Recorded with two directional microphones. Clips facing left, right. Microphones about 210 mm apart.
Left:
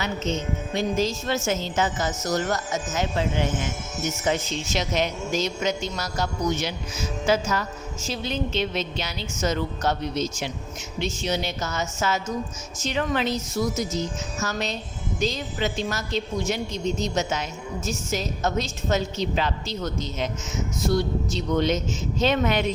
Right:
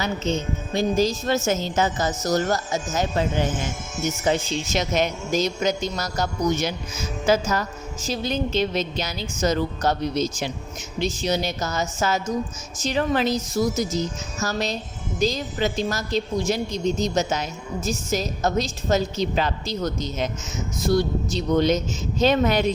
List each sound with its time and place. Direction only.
0.0 s speech: 35° right (ahead or behind)
4.8 s a man's voice: 45° right (ahead or behind)